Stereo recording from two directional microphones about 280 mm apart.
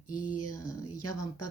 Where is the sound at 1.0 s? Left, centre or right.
Left.